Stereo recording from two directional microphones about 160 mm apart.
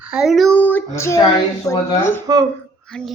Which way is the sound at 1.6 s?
20° left (ahead or behind).